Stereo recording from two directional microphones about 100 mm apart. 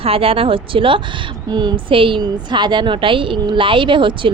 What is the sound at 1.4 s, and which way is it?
Speech, 45° right (ahead or behind).